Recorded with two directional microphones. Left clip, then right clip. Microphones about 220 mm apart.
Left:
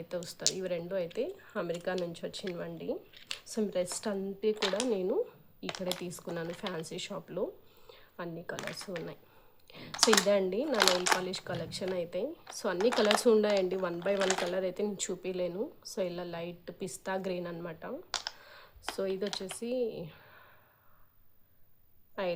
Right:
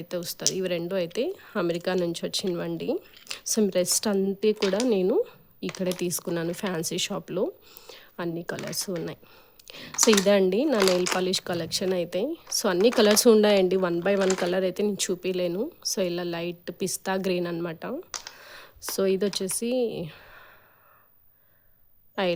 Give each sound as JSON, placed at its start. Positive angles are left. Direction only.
{"t": 0.1, "sound": "speech", "side_deg": -40}
{"t": 9.9, "sound": "speech", "side_deg": 5}
{"t": 10.2, "sound": "speech", "side_deg": -45}
{"t": 18.3, "sound": "a sound", "side_deg": -45}
{"t": 18.9, "sound": "speech", "side_deg": -45}
{"t": 22.2, "sound": "speech", "side_deg": -45}